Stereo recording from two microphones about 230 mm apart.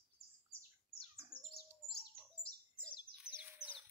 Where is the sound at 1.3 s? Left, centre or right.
Left.